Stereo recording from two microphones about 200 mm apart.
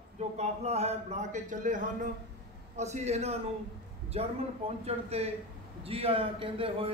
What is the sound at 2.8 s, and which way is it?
A man's voice, 35° right (ahead or behind).